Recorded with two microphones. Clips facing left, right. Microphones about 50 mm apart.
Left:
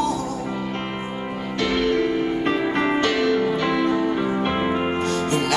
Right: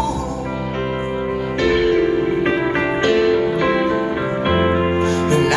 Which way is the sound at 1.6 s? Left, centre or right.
Right.